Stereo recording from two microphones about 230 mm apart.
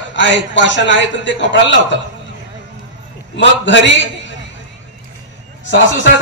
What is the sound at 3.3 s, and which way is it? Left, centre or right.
Speech, left.